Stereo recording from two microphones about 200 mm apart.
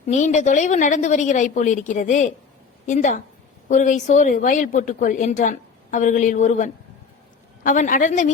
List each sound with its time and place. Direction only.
0.0 s a woman's voice: 35° left (ahead or behind)